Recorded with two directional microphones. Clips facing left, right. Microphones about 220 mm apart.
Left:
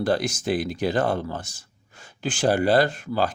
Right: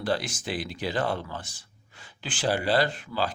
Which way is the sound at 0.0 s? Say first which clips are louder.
Left 6 dB; 45° left (ahead or behind).